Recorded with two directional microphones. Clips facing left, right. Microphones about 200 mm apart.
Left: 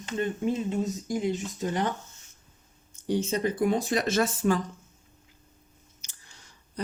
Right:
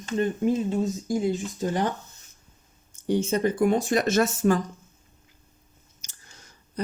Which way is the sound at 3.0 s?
50° right (ahead or behind).